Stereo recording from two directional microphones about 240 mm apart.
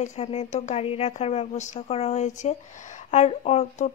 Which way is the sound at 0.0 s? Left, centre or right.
Left.